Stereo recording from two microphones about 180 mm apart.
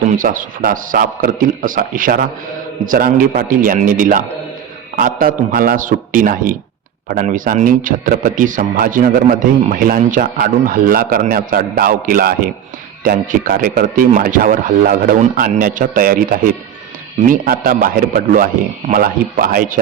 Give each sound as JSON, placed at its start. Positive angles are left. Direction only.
{"t": 0.1, "sound": "speech", "side_deg": -50}
{"t": 17.3, "sound": "speech", "side_deg": -50}